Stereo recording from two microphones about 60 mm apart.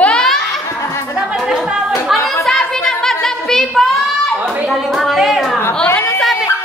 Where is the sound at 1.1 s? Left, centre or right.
Centre.